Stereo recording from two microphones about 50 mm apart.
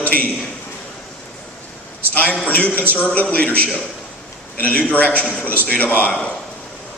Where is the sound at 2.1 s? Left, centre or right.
Left.